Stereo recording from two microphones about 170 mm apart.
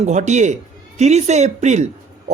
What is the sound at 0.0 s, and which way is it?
A man's voice, 45° right (ahead or behind).